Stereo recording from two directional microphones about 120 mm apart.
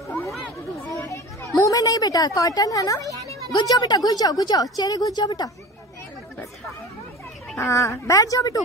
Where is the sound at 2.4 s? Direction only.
30° left (ahead or behind).